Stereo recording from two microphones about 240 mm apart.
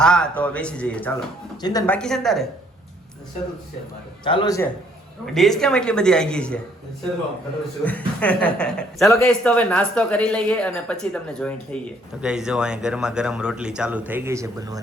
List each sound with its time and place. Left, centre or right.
0.0 s a man's voice: centre
2.0 s speech: centre
4.2 s a man's voice: centre
5.2 s speech: centre
7.9 s speech: centre